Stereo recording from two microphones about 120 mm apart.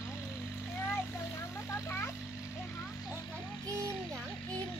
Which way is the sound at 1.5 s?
20° left (ahead or behind).